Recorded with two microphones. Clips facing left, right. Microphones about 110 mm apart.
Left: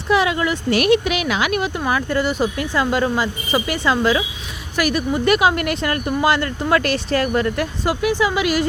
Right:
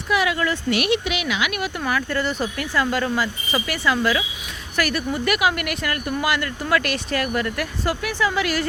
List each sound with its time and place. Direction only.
0.1 s speech: 25° left (ahead or behind)
0.7 s speech: 45° left (ahead or behind)
1.6 s speech: 25° left (ahead or behind)